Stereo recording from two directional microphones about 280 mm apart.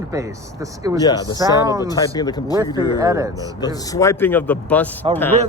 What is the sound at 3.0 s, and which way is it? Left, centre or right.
Speech, centre.